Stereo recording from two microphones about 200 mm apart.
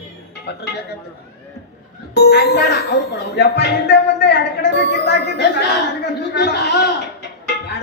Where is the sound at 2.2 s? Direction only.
55° left (ahead or behind).